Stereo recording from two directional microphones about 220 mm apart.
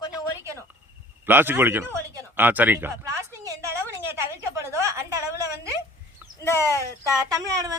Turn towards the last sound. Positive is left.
turn(degrees=-15)  # may be behind; listen again after turning